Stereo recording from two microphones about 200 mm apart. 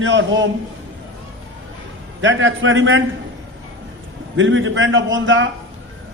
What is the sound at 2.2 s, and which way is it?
Speech, 70° right (ahead or behind).